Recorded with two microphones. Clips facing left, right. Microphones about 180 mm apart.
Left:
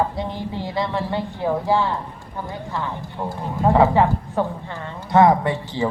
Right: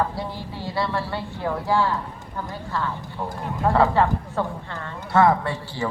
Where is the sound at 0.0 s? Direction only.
20° left (ahead or behind).